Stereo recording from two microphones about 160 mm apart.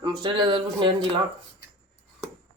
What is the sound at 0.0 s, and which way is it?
Speech, 30° right (ahead or behind).